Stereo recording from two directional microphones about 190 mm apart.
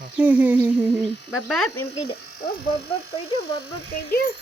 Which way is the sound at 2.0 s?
55° left (ahead or behind).